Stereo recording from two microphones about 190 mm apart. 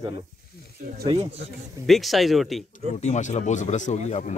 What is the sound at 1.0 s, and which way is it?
Speech, 30° right (ahead or behind).